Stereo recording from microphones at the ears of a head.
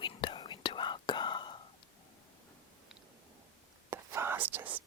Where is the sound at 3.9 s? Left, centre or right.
Right.